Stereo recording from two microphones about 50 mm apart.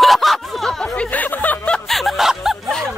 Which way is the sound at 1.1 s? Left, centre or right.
Left.